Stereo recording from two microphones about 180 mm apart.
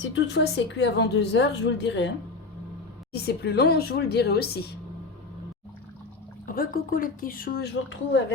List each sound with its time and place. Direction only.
0.1 s a woman's voice: 75° left (ahead or behind)
3.1 s speech: 65° left (ahead or behind)
6.4 s a woman's voice: 50° left (ahead or behind); by 8.2 s 75° left (ahead or behind)